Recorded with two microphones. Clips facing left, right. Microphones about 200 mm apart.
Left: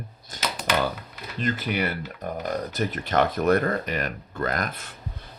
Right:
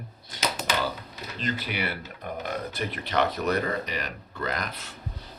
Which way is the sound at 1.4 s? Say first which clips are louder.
Left 5 dB; 45° left (ahead or behind).